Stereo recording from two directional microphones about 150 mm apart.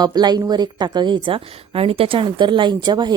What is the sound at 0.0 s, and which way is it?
A woman's voice, 25° right (ahead or behind).